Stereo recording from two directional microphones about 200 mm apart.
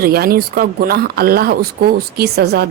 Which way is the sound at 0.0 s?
50° right (ahead or behind).